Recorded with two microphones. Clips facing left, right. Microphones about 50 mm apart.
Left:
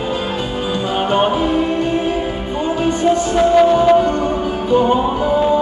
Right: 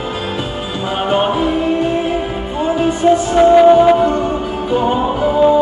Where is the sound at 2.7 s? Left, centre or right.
Centre.